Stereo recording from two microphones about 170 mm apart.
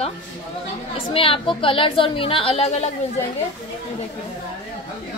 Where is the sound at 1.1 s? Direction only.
30° left (ahead or behind).